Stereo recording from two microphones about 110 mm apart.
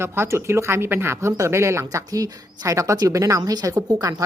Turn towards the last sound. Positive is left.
turn(degrees=-35)  # may be behind; listen again after turning